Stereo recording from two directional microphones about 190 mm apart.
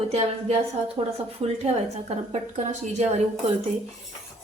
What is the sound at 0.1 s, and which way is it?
Speech, 35° right (ahead or behind).